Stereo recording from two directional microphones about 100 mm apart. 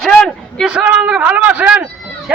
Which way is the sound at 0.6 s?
10° right (ahead or behind).